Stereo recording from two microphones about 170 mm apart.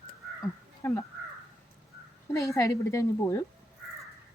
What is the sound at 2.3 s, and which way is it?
A woman's voice, 20° left (ahead or behind).